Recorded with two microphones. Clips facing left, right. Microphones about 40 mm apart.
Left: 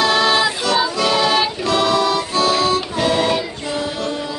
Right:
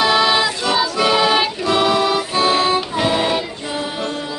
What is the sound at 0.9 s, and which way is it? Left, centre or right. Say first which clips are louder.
Music: right 1 dB; centre.